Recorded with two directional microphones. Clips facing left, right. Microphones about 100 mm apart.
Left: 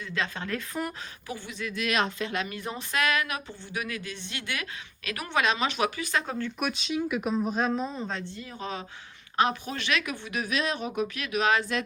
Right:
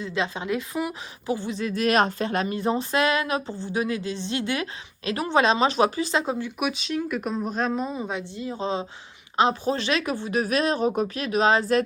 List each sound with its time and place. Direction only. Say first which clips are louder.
0.0 s speech: right 5 dB; 20° right (ahead or behind)
1.3 s speech: right 9 dB; 30° right (ahead or behind)
6.6 s speech: right 3 dB; centre (ahead or behind)
8.4 s speech: right 8 dB; 25° right (ahead or behind)